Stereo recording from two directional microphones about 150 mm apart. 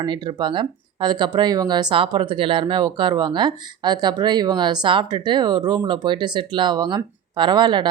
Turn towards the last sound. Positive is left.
turn(degrees=-30)  # may be behind; listen again after turning